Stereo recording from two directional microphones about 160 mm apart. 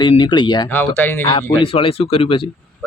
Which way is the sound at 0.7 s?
10° left (ahead or behind).